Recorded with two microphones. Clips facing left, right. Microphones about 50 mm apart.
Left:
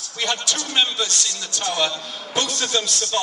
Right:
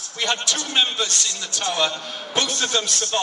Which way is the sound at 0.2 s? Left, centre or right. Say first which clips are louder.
Right 1 dB; right.